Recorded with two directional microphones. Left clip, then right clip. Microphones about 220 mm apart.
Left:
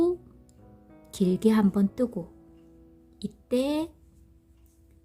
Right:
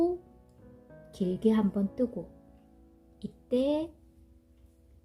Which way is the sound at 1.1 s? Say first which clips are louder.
Left 4 dB; 25° left (ahead or behind).